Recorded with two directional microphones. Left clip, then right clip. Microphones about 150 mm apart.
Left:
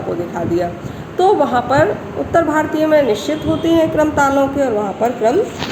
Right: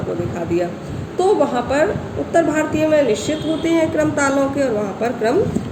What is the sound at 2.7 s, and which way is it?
Speech, 45° left (ahead or behind).